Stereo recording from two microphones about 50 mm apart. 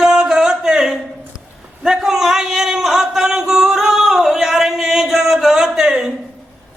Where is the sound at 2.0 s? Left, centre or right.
Centre.